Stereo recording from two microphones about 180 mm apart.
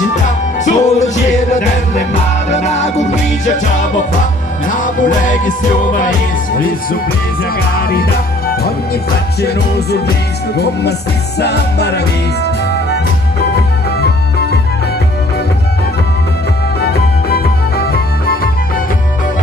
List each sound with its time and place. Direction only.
0.7 s music: 40° left (ahead or behind)
7.8 s music: 55° left (ahead or behind)
16.8 s music: 60° left (ahead or behind)